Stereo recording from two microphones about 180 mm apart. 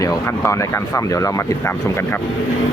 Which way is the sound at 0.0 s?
15° left (ahead or behind).